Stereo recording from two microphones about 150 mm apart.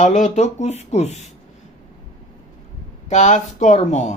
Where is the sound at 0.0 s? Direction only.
50° left (ahead or behind).